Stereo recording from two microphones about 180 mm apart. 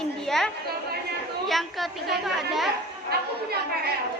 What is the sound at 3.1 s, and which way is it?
Chatter, 60° right (ahead or behind).